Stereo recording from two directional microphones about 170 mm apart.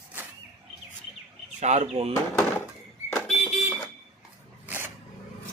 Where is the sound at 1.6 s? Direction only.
40° right (ahead or behind).